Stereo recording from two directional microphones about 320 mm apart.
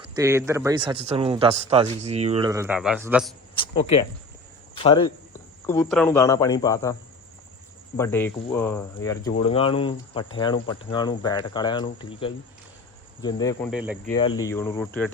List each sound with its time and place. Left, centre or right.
0.2 s speech: centre
3.6 s speech: centre
5.6 s speech: centre
7.9 s speech: centre
13.7 s speech: centre
14.1 s speech: centre